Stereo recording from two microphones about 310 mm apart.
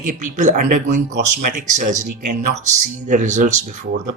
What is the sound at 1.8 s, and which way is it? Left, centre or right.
Speech, right.